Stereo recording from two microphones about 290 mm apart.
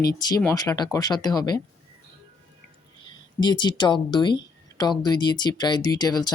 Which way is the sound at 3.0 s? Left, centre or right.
Centre.